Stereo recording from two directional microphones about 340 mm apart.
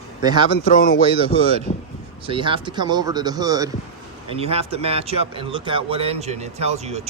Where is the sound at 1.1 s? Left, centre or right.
Centre.